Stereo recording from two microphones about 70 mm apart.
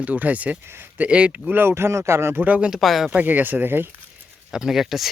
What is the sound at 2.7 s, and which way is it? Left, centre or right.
Speech, centre.